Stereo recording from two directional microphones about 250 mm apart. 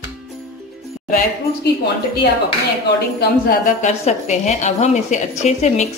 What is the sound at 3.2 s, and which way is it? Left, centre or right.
A woman's voice, left.